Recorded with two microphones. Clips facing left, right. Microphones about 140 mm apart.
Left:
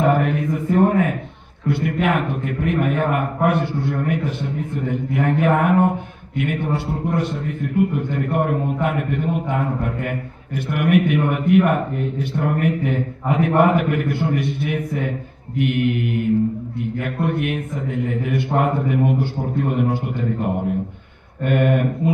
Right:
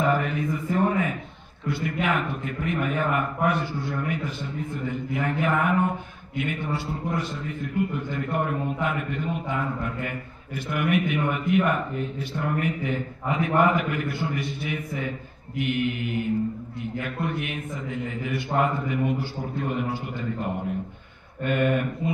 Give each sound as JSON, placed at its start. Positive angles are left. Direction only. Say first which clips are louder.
{"t": 0.0, "sound": "a sound", "louder": "left 6 dB", "side_deg": 60}
{"t": 1.7, "sound": "a man's voice", "louder": "left 6 dB", "side_deg": 60}
{"t": 21.5, "sound": "a man's voice", "louder": "left 5 dB", "side_deg": 60}